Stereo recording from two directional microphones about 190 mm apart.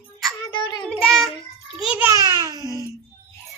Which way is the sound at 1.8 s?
10° right (ahead or behind).